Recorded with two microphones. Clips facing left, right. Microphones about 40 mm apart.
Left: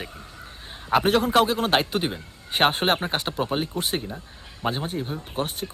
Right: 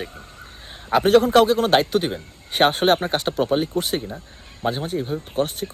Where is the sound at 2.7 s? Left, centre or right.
Centre.